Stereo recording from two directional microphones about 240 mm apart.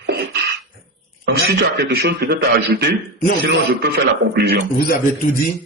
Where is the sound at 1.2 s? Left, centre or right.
Right.